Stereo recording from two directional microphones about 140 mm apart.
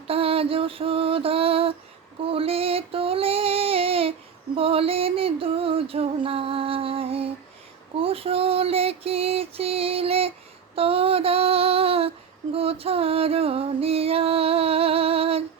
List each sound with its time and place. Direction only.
0.1 s music: 45° right (ahead or behind)
2.2 s female singing: 45° right (ahead or behind)
4.5 s a sound: 40° right (ahead or behind)
7.9 s female singing: 45° right (ahead or behind)
12.5 s music: 45° right (ahead or behind)